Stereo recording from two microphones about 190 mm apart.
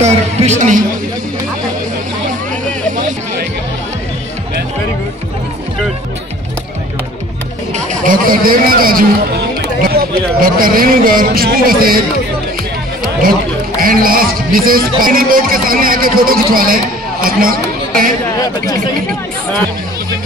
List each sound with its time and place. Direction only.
0.0 s a woman's voice: 35° right (ahead or behind)
7.7 s a sound: 45° right (ahead or behind)
10.4 s speech: 50° right (ahead or behind)
13.7 s speech: 50° right (ahead or behind)